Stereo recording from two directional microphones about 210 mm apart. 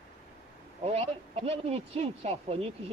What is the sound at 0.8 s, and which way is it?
Speech, 30° right (ahead or behind).